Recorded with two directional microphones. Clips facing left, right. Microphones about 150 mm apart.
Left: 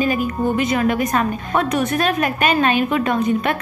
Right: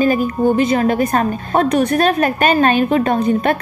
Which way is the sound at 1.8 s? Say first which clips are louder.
Right 5 dB; 55° right (ahead or behind).